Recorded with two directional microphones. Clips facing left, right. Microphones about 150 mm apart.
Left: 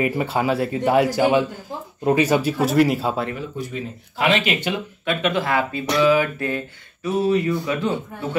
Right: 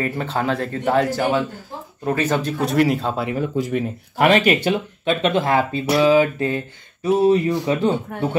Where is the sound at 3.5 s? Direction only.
90° right.